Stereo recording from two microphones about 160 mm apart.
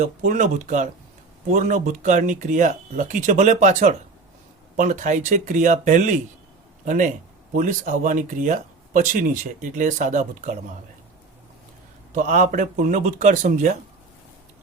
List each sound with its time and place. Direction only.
0.0 s speech: 50° right (ahead or behind)
12.1 s speech: 50° right (ahead or behind)